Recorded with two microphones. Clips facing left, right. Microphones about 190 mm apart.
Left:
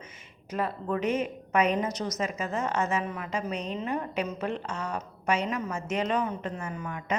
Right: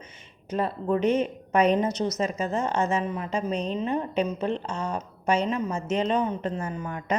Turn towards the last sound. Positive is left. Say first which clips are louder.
# right 3 dB
turn(degrees=-35)  # may be behind; listen again after turning